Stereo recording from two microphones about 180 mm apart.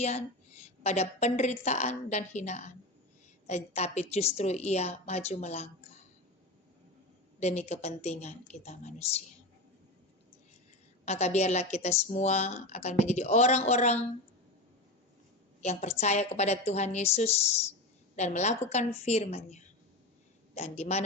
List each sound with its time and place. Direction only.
0.8 s a woman's voice: 40° left (ahead or behind)
7.3 s a woman's voice: 40° left (ahead or behind)
11.0 s a woman's voice: 35° left (ahead or behind)
15.6 s a woman's voice: 35° left (ahead or behind)